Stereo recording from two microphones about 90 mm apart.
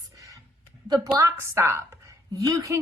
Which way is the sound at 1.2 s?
35° right (ahead or behind).